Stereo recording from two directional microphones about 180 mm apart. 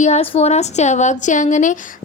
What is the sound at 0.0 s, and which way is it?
A woman's voice, 35° left (ahead or behind).